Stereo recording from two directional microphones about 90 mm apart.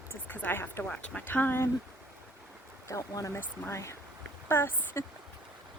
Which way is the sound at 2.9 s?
35° left (ahead or behind).